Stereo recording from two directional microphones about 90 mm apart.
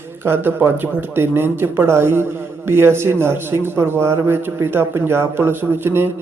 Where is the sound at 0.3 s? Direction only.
25° right (ahead or behind).